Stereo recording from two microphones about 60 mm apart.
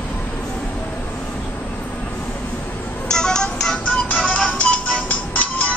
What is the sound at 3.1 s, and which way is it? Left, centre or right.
Music, centre.